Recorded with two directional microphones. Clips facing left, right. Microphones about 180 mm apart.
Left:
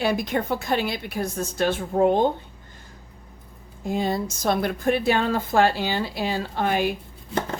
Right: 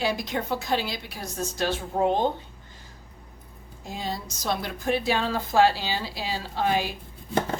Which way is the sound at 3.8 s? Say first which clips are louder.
Left 8 dB; 55° left (ahead or behind).